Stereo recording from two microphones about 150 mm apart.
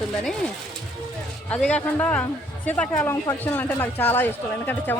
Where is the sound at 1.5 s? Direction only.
10° left (ahead or behind).